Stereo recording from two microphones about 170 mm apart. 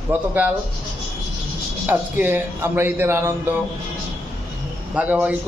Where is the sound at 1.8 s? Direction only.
10° right (ahead or behind).